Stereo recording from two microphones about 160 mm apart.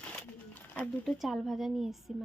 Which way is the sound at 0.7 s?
5° left (ahead or behind).